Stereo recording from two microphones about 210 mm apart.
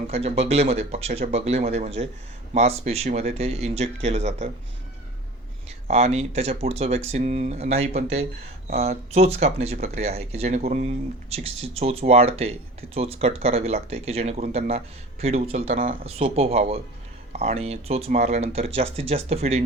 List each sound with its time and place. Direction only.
0.1 s speech: 30° right (ahead or behind)
5.9 s speech: 30° right (ahead or behind)